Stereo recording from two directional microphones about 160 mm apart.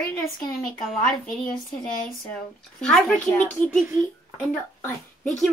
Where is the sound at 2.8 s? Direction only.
5° left (ahead or behind).